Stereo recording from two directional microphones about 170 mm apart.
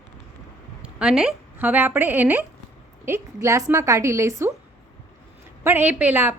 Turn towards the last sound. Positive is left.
turn(degrees=-10)  # may be behind; listen again after turning